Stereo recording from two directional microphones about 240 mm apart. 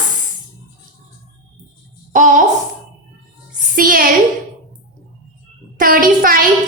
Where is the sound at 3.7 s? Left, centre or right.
Right.